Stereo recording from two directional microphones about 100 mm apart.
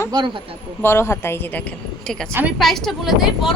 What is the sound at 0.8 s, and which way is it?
Speech, 25° left (ahead or behind).